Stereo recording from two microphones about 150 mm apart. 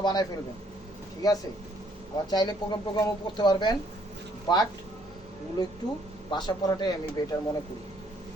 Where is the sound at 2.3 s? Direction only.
30° left (ahead or behind).